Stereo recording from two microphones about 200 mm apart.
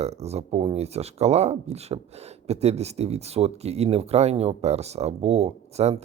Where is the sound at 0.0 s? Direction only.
35° right (ahead or behind).